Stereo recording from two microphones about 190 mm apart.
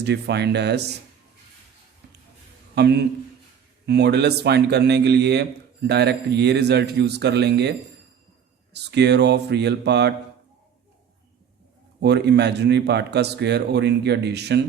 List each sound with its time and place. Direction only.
0.0 s a man's voice: 60° right (ahead or behind)
2.7 s a man's voice: 60° right (ahead or behind)
12.0 s a man's voice: 65° right (ahead or behind)